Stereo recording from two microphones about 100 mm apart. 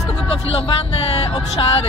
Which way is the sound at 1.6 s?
55° left (ahead or behind).